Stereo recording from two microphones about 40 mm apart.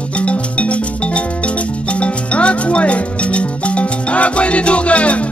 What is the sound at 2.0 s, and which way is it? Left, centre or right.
Music, left.